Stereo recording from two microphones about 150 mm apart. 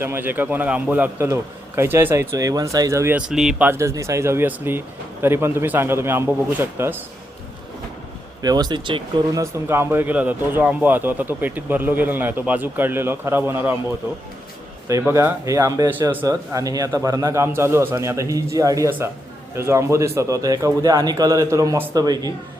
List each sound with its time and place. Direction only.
0.0 s speech: 15° right (ahead or behind)
3.2 s speech: 5° right (ahead or behind)
3.7 s speech: 20° right (ahead or behind)
8.4 s speech: 25° right (ahead or behind)
14.8 s a man's voice: 20° right (ahead or behind)